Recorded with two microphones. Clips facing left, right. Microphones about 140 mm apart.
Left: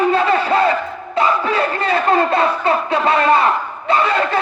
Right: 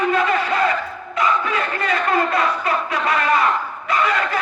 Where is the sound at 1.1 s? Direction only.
30° left (ahead or behind).